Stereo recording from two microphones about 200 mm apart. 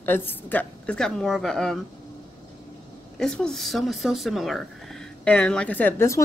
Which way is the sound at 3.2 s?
Centre (ahead or behind).